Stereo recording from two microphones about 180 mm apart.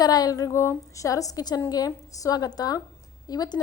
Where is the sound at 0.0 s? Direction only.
20° left (ahead or behind).